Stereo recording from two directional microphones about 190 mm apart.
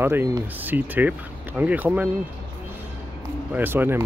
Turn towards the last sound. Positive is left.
turn(degrees=-10)  # may be behind; listen again after turning